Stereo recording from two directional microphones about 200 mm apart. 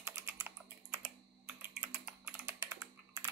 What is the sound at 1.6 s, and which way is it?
Typing, 10° right (ahead or behind).